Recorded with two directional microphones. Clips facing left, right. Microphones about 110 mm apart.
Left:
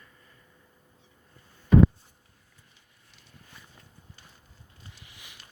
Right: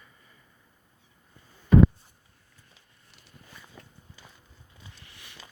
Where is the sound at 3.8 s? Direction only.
70° right (ahead or behind).